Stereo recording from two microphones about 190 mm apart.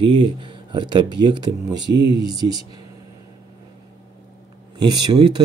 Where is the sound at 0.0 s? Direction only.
25° right (ahead or behind).